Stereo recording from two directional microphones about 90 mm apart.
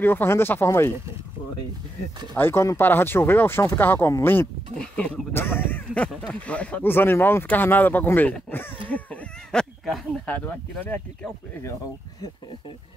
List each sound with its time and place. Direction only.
0.0 s speech: 25° left (ahead or behind)
2.3 s speech: 25° left (ahead or behind)
4.7 s speech: 10° left (ahead or behind)
5.3 s speech: 25° left (ahead or behind)
8.8 s a sound: 15° left (ahead or behind)
10.2 s speech: 15° left (ahead or behind)